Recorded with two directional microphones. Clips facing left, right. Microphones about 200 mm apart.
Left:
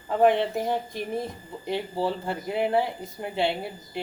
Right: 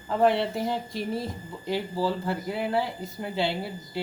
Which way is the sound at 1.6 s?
20° left (ahead or behind).